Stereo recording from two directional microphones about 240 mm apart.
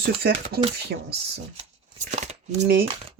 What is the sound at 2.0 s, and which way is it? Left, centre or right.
Speech, right.